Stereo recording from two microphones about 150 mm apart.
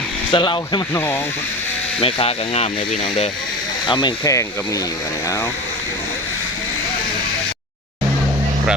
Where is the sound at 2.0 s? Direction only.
40° left (ahead or behind).